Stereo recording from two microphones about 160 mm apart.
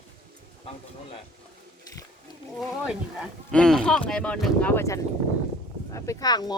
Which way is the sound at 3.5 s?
5° left (ahead or behind).